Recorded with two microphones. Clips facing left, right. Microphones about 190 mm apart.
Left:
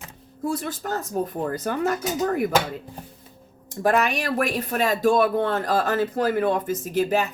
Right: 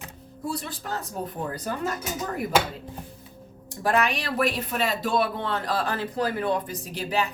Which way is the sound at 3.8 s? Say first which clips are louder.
Left 3 dB; 45° left (ahead or behind).